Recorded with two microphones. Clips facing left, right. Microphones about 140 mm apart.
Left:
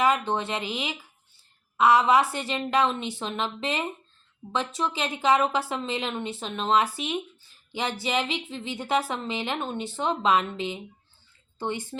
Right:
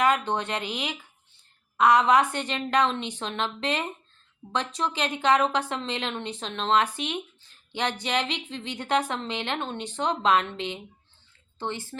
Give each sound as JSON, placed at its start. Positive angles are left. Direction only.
{"t": 0.0, "sound": "a woman's voice", "side_deg": 5}
{"t": 11.6, "sound": "a woman's voice", "side_deg": 15}